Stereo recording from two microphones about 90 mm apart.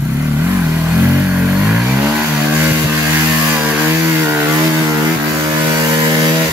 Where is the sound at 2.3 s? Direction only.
10° right (ahead or behind); by 4.5 s 25° right (ahead or behind).